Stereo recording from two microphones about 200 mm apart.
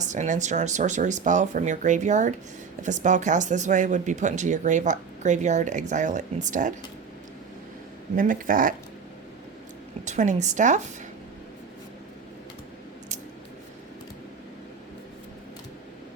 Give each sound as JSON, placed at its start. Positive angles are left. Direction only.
{"t": 0.0, "sound": "speech", "side_deg": -35}
{"t": 8.1, "sound": "speech", "side_deg": -40}
{"t": 10.1, "sound": "speech", "side_deg": -35}